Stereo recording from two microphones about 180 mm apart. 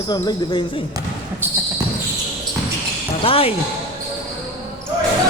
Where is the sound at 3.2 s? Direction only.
30° left (ahead or behind).